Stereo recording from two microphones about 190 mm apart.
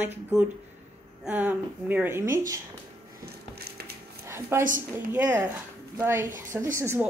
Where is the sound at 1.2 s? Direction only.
10° right (ahead or behind).